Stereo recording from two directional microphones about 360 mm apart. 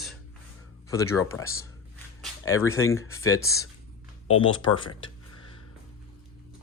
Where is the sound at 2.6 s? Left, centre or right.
Centre.